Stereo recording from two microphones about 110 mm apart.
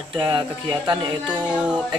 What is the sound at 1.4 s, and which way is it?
Speech, 10° right (ahead or behind).